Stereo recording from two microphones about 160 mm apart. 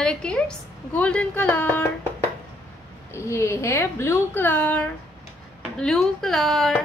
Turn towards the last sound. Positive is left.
turn(degrees=0)  # may be behind; listen again after turning